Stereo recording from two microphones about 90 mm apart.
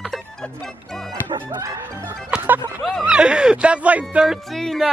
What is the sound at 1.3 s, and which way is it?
Music, 60° right (ahead or behind).